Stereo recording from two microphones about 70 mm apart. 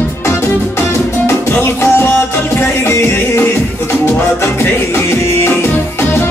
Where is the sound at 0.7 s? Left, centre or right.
Left.